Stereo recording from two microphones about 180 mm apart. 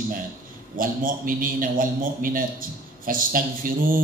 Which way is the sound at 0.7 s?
50° right (ahead or behind).